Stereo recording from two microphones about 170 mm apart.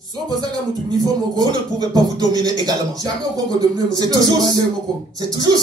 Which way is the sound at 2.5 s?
25° right (ahead or behind).